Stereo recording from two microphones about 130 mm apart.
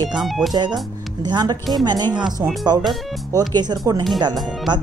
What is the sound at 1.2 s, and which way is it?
Speech, 30° right (ahead or behind).